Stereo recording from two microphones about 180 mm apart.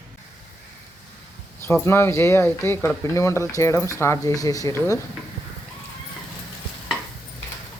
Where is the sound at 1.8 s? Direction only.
15° left (ahead or behind).